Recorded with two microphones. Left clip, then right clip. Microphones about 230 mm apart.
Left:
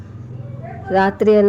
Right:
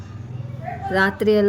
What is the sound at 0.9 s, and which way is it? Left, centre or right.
Speech, centre.